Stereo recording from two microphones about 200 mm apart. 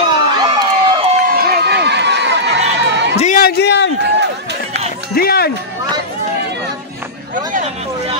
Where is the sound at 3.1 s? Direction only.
40° left (ahead or behind); by 3.9 s 55° left (ahead or behind).